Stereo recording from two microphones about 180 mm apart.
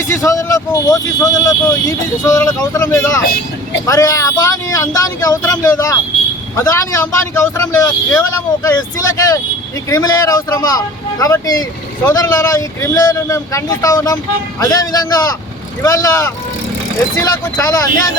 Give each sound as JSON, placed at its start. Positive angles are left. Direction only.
{"t": 0.1, "sound": "speech", "side_deg": 15}
{"t": 9.9, "sound": "speech", "side_deg": 20}